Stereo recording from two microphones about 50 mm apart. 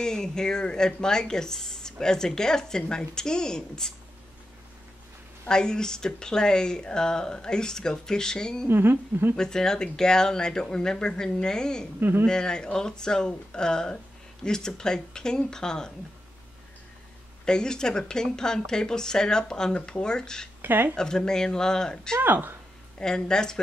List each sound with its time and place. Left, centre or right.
0.0 s a woman's voice: centre
5.5 s a woman's voice: centre
8.6 s a woman's voice: right
9.4 s a woman's voice: centre
12.0 s a woman's voice: right
12.3 s a woman's voice: centre
17.5 s a woman's voice: centre
20.6 s speech: right
20.9 s a woman's voice: centre
22.2 s a woman's voice: right
22.9 s a woman's voice: centre